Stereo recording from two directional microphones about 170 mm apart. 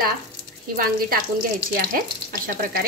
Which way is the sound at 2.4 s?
55° right (ahead or behind).